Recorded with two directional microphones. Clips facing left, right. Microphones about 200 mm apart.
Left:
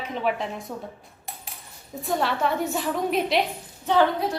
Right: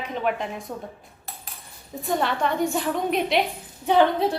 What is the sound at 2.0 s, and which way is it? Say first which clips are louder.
Speech: even; centre (ahead or behind).